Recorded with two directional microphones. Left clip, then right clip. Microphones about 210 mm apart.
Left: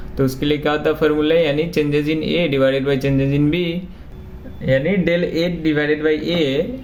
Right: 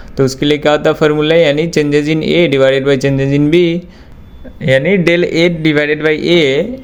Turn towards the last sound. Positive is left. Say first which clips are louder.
# right 8 dB
turn(degrees=-45)  # may be behind; listen again after turning